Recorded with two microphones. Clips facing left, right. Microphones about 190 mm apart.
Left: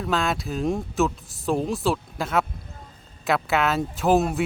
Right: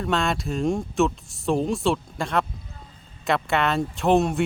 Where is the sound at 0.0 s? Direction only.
Centre (ahead or behind).